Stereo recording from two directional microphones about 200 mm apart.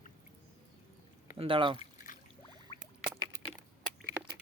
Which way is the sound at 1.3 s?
25° right (ahead or behind).